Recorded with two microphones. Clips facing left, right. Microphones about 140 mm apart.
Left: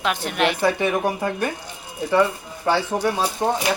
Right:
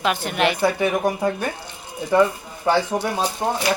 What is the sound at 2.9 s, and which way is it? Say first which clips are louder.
Speech: left 1 dB; 20° left (ahead or behind).